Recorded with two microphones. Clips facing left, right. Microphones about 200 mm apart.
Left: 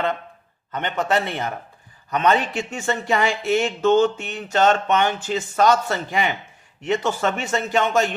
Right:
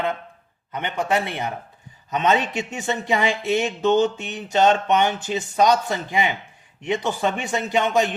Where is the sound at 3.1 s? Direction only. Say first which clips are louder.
Left 1 dB; 15° right (ahead or behind).